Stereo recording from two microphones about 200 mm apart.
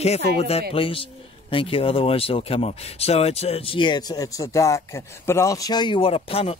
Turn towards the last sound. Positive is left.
turn(degrees=30)  # may be behind; listen again after turning